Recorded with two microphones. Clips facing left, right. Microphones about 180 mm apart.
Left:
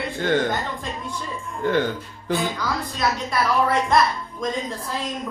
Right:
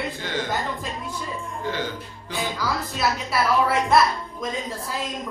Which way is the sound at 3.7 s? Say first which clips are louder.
Even; 5° right (ahead or behind).